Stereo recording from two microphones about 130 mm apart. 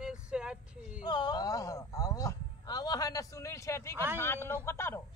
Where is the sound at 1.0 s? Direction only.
35° left (ahead or behind).